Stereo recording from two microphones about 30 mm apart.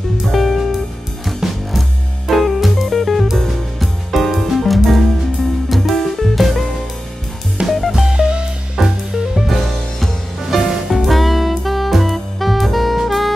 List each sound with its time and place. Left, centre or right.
0.3 s music: centre
8.1 s music: right
8.8 s music: centre
9.1 s music: centre
9.5 s music: centre